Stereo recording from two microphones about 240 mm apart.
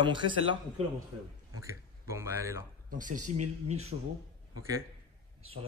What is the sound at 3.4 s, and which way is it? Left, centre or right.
Speech, right.